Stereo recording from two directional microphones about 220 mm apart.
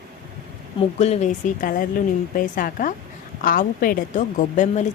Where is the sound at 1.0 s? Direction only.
30° left (ahead or behind).